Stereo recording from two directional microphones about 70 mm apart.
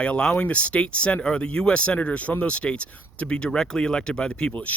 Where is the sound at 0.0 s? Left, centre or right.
Centre.